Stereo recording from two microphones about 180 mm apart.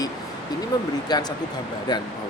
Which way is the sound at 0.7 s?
20° left (ahead or behind).